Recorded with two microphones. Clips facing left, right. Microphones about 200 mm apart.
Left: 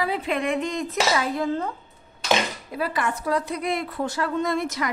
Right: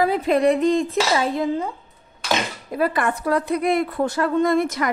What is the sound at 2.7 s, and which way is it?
A woman's voice, 50° right (ahead or behind).